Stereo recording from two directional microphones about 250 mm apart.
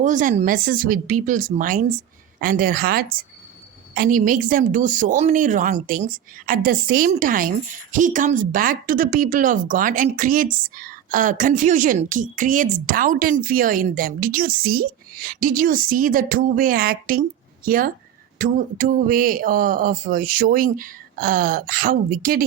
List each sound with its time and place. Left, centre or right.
0.0 s speech: right